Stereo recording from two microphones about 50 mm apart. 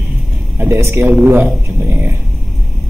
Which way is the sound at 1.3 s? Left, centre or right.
Right.